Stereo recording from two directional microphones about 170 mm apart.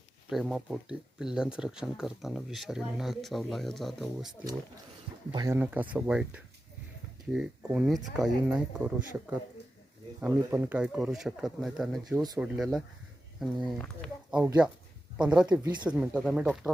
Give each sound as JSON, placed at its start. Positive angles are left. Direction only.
{"t": 0.3, "sound": "speech", "side_deg": 0}
{"t": 5.3, "sound": "speech", "side_deg": -25}
{"t": 5.5, "sound": "speech", "side_deg": -10}